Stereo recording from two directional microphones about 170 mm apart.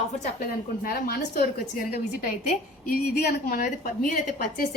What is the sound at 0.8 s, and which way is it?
A woman's voice, 65° left (ahead or behind).